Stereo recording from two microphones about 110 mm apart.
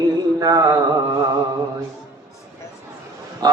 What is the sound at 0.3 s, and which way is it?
Mantra, 30° right (ahead or behind).